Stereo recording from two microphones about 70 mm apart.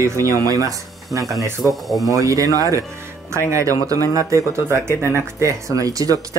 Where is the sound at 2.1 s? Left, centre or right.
Right.